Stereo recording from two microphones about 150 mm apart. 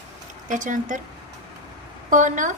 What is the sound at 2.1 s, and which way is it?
Speech, 60° right (ahead or behind).